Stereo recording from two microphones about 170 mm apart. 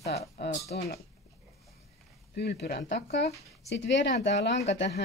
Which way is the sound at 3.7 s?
90° left.